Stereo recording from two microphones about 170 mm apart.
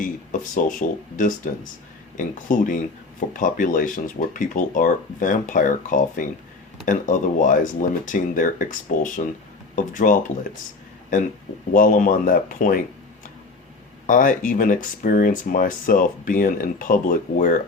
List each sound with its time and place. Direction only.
0.0 s speech: 50° left (ahead or behind)
11.7 s speech: 50° left (ahead or behind)
14.1 s speech: 50° left (ahead or behind)